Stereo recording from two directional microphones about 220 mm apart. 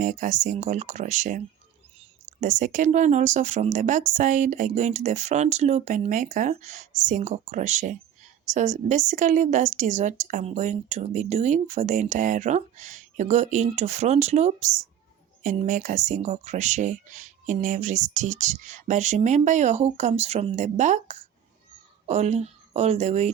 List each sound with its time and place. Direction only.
0.0 s a woman's voice: 35° right (ahead or behind)
2.4 s a woman's voice: 35° right (ahead or behind)